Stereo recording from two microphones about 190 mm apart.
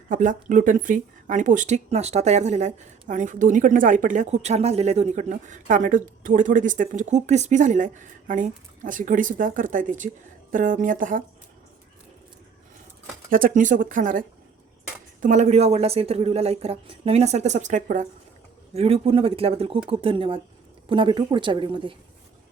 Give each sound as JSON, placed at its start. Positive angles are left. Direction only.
{"t": 0.1, "sound": "speech", "side_deg": -45}
{"t": 13.3, "sound": "speech", "side_deg": -45}
{"t": 18.7, "sound": "speech", "side_deg": -30}